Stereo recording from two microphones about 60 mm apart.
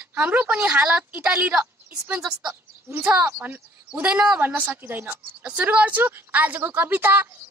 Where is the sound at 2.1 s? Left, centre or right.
Centre.